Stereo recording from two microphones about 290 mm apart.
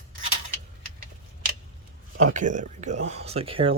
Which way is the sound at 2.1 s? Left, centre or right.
Right.